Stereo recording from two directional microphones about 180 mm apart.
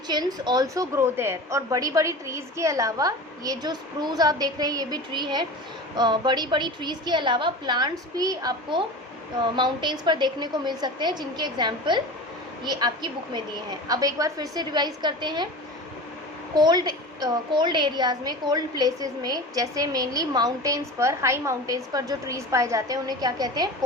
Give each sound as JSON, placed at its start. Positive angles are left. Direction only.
{"t": 0.1, "sound": "a woman's voice", "side_deg": -20}
{"t": 16.6, "sound": "a woman's voice", "side_deg": -25}